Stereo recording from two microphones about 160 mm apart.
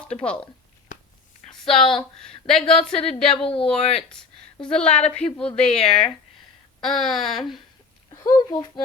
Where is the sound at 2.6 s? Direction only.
35° left (ahead or behind).